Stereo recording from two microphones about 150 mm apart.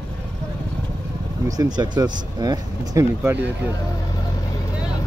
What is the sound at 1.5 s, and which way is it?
Speech, 25° right (ahead or behind).